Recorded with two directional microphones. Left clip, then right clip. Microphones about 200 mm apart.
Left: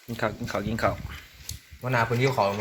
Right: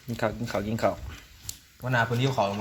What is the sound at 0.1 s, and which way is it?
Speech, 10° right (ahead or behind).